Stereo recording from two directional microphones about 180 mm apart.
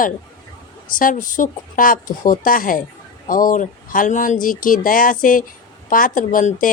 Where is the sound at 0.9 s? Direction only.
50° left (ahead or behind).